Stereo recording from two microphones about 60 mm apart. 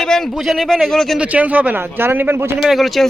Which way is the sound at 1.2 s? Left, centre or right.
Right.